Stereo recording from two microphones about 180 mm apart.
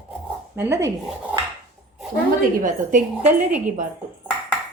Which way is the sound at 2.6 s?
45° right (ahead or behind).